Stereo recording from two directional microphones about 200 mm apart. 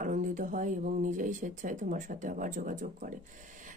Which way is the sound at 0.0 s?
40° right (ahead or behind).